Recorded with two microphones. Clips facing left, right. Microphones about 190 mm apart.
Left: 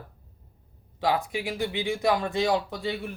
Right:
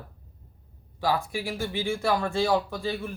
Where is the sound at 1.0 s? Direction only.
20° left (ahead or behind).